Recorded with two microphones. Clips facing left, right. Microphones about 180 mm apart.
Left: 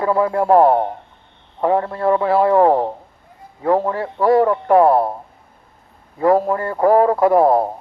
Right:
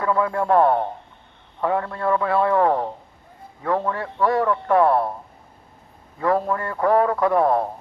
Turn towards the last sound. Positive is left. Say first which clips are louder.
# left 5 dB
turn(degrees=30)  # may be behind; listen again after turning